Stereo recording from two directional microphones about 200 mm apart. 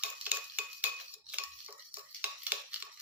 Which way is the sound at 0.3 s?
5° right (ahead or behind).